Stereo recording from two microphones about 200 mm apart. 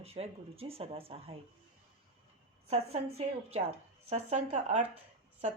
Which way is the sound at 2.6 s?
30° right (ahead or behind).